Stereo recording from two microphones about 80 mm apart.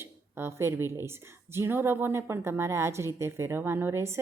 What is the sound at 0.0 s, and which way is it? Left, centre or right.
A woman's voice, right.